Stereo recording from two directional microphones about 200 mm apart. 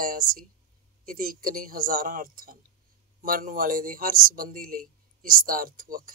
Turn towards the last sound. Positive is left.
turn(degrees=-45)  # may be behind; listen again after turning